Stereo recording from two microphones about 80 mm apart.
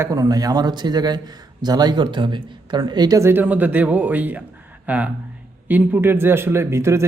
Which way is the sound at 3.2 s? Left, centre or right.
Right.